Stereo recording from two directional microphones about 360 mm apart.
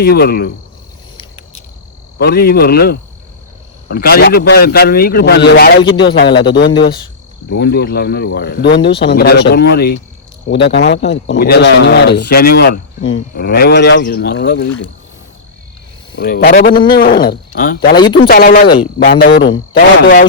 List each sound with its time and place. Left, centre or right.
0.0 s speech: left
2.1 s speech: left
5.8 s a man's voice: centre
6.4 s speech: left
16.1 s speech: left
17.9 s a man's voice: centre
18.3 s speech: left